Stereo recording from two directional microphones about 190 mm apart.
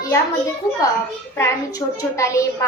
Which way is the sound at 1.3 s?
15° left (ahead or behind).